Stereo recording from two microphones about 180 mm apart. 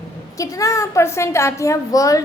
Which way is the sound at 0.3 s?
15° left (ahead or behind).